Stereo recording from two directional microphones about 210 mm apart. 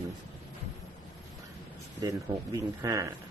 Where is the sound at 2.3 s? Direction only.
15° right (ahead or behind).